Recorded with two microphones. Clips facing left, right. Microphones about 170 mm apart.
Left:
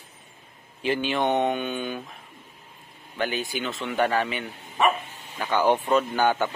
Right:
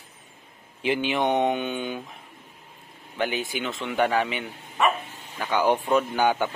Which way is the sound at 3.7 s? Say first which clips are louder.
Right 1 dB; centre (ahead or behind).